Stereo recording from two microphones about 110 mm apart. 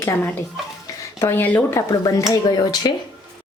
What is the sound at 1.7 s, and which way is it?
Speech, 30° left (ahead or behind).